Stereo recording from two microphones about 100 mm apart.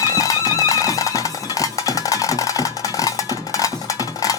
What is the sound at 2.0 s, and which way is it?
Music, 35° left (ahead or behind).